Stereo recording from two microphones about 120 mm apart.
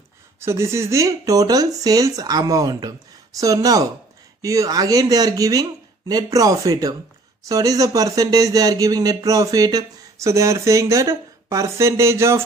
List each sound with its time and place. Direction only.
0.4 s speech: 20° right (ahead or behind)